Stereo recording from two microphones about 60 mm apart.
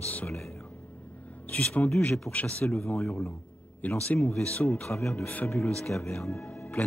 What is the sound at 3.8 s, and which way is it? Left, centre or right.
Speech, left.